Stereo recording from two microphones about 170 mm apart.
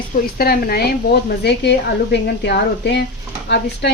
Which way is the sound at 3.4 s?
90° left.